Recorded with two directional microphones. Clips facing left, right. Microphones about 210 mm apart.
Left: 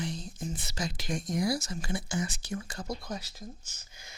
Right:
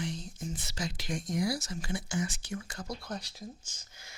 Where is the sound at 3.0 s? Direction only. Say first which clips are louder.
Left 1 dB; 10° left (ahead or behind).